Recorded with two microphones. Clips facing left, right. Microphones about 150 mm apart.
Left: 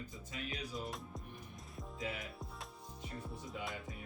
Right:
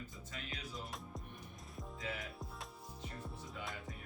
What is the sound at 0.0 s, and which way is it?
Music, 15° left (ahead or behind).